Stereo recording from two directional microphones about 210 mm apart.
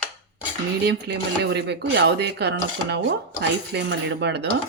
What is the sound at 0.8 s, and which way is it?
Speech, 55° right (ahead or behind).